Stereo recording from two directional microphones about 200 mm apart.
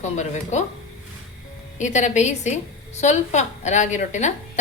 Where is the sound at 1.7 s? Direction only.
35° left (ahead or behind).